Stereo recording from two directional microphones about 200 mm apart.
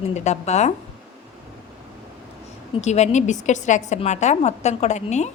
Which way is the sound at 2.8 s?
35° left (ahead or behind).